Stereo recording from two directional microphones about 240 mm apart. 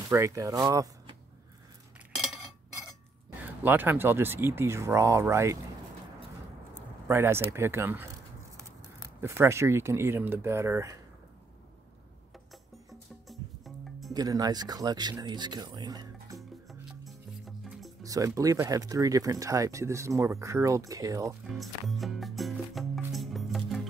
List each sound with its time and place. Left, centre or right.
0.1 s speech: centre
2.1 s cutlery: centre
3.6 s speech: centre
7.1 s speech: centre
9.2 s speech: centre
13.3 s music: centre
14.1 s speech: centre
16.3 s music: centre
18.0 s speech: centre
21.5 s music: centre